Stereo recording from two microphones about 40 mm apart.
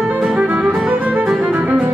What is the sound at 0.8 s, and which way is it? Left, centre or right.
Music, right.